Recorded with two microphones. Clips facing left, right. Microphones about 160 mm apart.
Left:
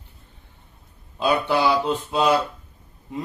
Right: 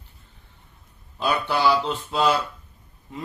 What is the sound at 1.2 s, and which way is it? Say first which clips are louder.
A man's voice: left 2 dB; 20° left (ahead or behind).